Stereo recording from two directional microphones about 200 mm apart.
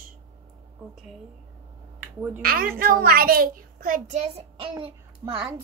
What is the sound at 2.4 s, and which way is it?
A child's voice, 50° right (ahead or behind).